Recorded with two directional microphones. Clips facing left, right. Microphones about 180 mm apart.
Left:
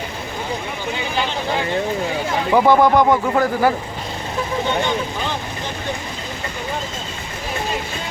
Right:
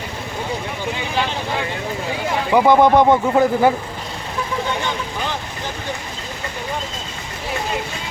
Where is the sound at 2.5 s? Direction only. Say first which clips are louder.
Right 1 dB; 10° right (ahead or behind).